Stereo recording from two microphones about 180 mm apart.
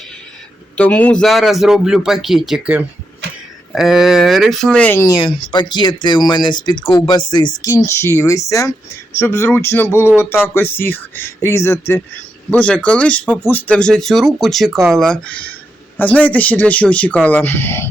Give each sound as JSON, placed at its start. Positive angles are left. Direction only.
{"t": 0.8, "sound": "speech", "side_deg": 10}